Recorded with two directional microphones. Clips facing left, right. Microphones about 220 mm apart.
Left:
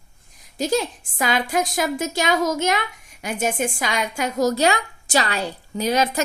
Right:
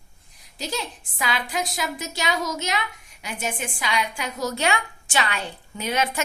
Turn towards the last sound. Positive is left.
turn(degrees=35)  # may be behind; listen again after turning